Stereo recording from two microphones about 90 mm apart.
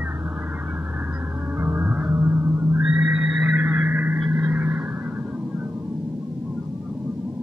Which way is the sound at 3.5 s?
20° right (ahead or behind).